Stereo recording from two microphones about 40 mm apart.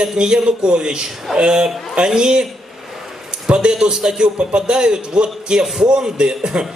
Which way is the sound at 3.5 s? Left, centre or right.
Right.